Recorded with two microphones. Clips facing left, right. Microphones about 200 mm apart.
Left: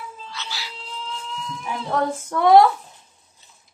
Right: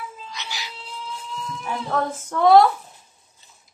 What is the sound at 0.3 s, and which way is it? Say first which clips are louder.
Cat: even; 15° right (ahead or behind).